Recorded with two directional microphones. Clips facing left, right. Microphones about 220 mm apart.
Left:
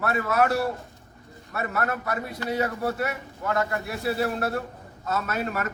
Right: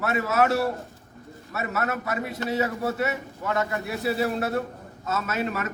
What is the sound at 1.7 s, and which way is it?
A man's voice, 5° right (ahead or behind).